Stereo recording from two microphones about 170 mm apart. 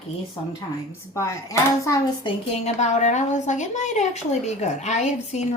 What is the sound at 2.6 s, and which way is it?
A woman's voice, 40° left (ahead or behind).